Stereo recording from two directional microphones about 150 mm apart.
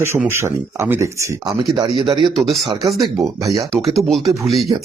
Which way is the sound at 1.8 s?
30° right (ahead or behind).